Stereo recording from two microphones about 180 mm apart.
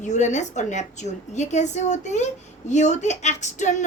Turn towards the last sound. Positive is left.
turn(degrees=40)  # may be behind; listen again after turning